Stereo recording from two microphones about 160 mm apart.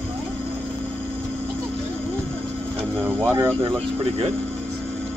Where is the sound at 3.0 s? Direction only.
15° right (ahead or behind).